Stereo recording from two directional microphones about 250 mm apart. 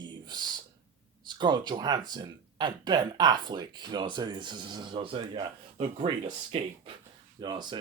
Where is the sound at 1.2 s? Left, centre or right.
Centre.